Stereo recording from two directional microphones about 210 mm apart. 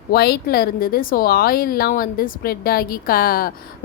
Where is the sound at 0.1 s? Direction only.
45° left (ahead or behind).